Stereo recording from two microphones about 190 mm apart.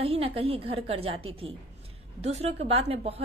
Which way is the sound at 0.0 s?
30° right (ahead or behind).